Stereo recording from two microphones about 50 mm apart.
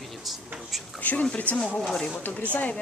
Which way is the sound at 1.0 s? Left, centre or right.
Left.